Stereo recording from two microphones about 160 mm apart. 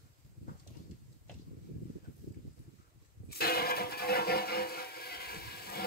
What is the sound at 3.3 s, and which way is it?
Music, 75° left (ahead or behind).